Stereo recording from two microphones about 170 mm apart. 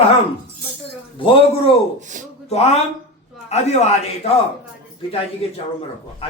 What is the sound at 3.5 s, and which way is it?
Speech, 40° left (ahead or behind).